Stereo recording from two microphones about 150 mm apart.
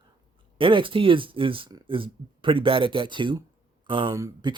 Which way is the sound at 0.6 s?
35° right (ahead or behind).